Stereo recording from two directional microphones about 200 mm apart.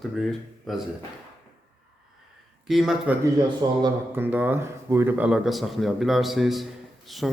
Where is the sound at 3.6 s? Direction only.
25° right (ahead or behind).